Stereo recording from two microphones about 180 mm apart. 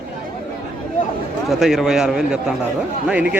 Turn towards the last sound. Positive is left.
turn(degrees=-5)  # may be behind; listen again after turning